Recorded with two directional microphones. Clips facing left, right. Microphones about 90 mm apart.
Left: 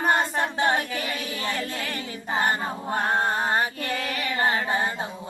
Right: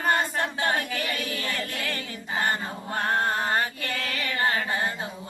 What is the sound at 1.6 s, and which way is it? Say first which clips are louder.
Music: left 1 dB; 15° left (ahead or behind).